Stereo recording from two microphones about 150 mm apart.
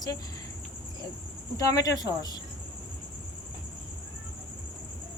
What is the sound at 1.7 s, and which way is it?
Speech, 25° left (ahead or behind).